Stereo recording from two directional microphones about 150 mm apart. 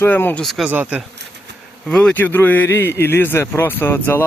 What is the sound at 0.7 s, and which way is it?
Speech, 10° right (ahead or behind).